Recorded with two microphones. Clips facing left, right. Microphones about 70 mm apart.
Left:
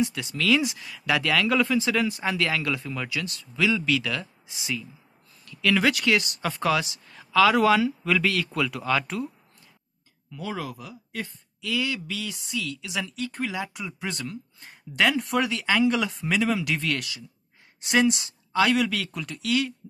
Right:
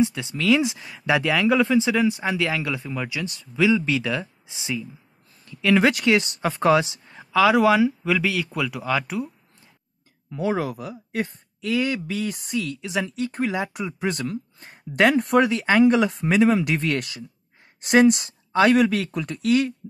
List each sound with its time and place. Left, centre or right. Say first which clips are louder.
0.0 s speech: right 4 dB; right
10.3 s speech: right 8 dB; right